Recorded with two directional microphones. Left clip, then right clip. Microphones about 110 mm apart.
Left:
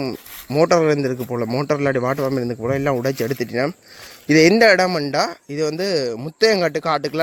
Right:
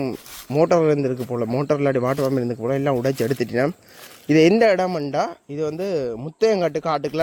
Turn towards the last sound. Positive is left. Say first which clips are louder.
# left 2 dB
turn(degrees=0)  # may be behind; listen again after turning